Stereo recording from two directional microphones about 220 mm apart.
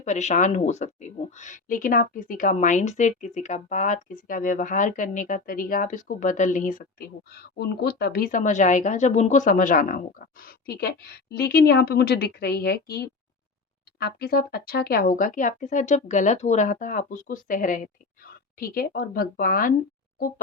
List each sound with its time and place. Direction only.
0.0 s speech: 30° left (ahead or behind)